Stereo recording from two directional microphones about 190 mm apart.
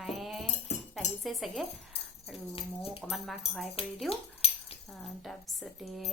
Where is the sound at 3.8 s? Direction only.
30° left (ahead or behind).